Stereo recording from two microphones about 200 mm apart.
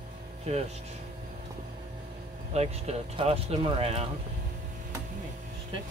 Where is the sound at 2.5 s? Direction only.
30° right (ahead or behind).